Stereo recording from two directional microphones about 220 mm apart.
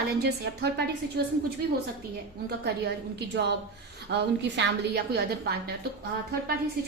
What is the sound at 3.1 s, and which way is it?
A woman's voice, 50° right (ahead or behind).